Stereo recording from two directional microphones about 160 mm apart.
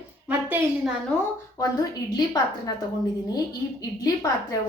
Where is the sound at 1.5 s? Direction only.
25° left (ahead or behind).